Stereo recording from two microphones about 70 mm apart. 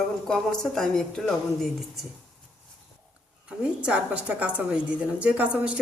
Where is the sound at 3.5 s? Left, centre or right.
Centre.